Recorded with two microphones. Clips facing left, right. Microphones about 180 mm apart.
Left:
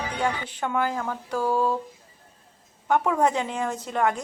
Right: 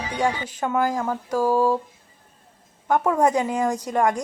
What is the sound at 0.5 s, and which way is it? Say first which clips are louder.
A woman's voice: right 3 dB; 10° right (ahead or behind).